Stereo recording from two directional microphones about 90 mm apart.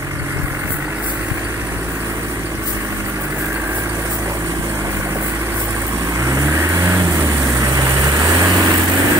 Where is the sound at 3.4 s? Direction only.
30° right (ahead or behind).